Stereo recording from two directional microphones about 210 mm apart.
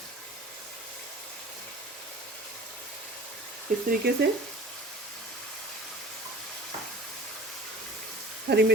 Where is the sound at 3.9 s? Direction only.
50° right (ahead or behind).